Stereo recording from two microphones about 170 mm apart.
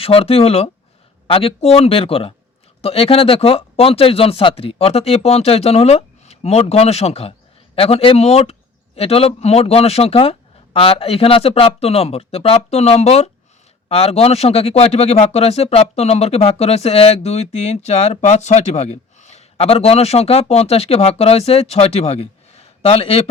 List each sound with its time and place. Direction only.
0.0 s a man's voice: 35° left (ahead or behind)